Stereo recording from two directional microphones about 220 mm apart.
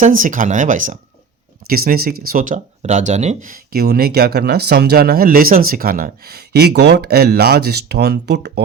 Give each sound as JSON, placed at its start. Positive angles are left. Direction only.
{"t": 0.0, "sound": "speech", "side_deg": -35}